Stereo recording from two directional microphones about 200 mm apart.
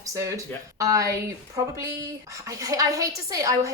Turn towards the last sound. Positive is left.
turn(degrees=-15)  # may be behind; listen again after turning